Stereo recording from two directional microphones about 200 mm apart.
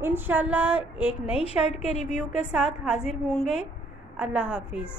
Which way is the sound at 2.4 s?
5° right (ahead or behind).